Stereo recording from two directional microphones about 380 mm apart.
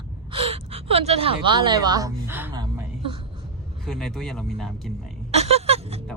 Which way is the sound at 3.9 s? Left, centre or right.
Centre.